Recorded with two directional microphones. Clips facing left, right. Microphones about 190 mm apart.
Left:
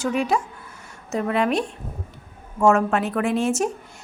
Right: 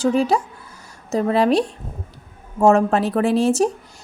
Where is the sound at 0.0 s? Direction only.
30° right (ahead or behind).